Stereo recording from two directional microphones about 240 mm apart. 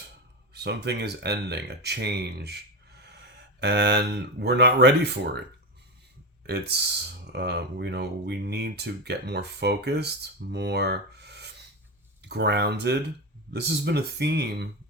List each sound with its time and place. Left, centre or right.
0.5 s speech: right
6.5 s speech: right
10.5 s a sound: right
12.2 s speech: right